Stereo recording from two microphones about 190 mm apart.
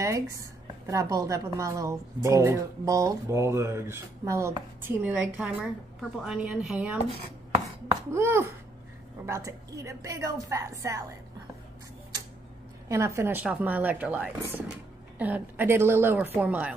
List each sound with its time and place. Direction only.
0.0 s a woman's voice: 15° right (ahead or behind)
12.8 s a woman's voice: 15° right (ahead or behind)